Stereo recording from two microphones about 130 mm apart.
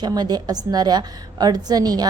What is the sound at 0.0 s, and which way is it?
A woman's voice, 30° right (ahead or behind).